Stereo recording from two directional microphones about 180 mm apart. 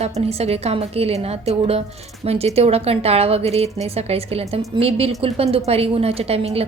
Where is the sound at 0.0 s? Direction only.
35° right (ahead or behind).